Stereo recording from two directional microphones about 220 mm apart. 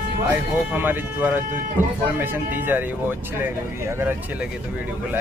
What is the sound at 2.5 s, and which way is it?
Speech, 10° right (ahead or behind).